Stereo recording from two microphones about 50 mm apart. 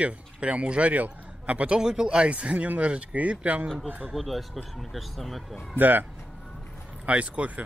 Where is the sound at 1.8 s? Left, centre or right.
Centre.